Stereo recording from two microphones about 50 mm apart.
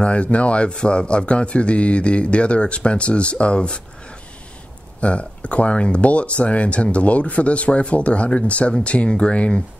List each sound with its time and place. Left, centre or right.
0.0 s a man's voice: left
5.0 s a man's voice: left